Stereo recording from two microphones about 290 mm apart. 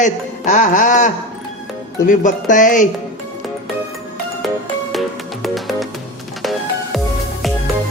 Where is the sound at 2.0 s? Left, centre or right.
Left.